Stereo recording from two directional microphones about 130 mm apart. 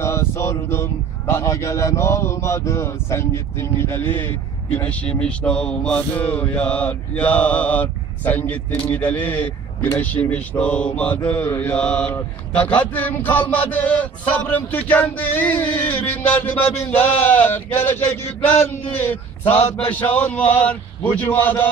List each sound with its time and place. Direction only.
0.0 s a sound: 20° left (ahead or behind)
1.3 s a man's voice: 25° left (ahead or behind)
5.2 s mantra: 10° left (ahead or behind)